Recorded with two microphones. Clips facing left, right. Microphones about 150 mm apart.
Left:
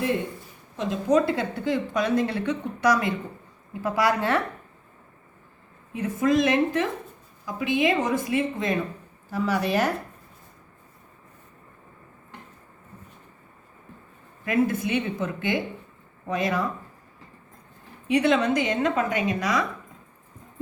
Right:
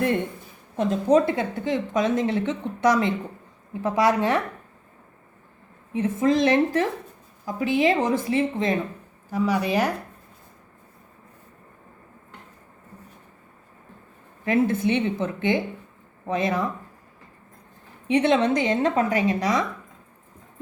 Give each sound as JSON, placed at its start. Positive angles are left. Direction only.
{"t": 1.0, "sound": "speech", "side_deg": -25}
{"t": 5.9, "sound": "a woman's voice", "side_deg": -25}
{"t": 9.3, "sound": "speech", "side_deg": -15}
{"t": 14.4, "sound": "speech", "side_deg": -30}
{"t": 18.1, "sound": "speech", "side_deg": -25}